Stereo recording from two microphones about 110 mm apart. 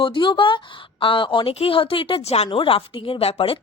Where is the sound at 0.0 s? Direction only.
50° left (ahead or behind); by 2.5 s 70° left (ahead or behind).